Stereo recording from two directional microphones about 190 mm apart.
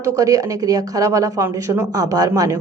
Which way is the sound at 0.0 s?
20° right (ahead or behind).